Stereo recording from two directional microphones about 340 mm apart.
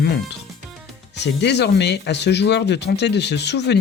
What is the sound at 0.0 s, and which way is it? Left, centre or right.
Speech, left.